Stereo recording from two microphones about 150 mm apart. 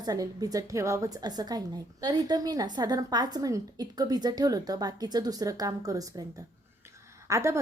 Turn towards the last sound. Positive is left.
turn(degrees=-20)  # may be behind; listen again after turning